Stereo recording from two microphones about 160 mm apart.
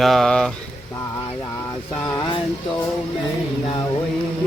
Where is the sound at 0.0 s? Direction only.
Centre (ahead or behind).